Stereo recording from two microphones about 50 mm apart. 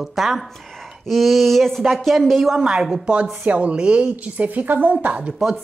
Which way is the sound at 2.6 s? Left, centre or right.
Centre.